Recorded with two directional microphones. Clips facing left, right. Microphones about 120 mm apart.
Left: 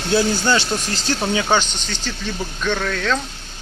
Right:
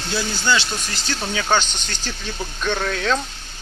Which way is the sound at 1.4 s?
Centre (ahead or behind).